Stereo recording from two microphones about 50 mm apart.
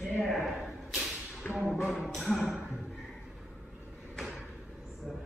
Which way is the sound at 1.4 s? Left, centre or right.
Left.